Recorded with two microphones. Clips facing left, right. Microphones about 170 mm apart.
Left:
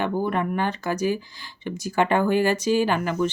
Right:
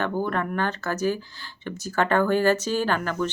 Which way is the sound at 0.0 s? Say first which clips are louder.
Left 2 dB; 10° left (ahead or behind).